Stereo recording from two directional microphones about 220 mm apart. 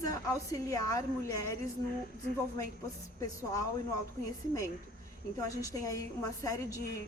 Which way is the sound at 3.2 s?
15° left (ahead or behind).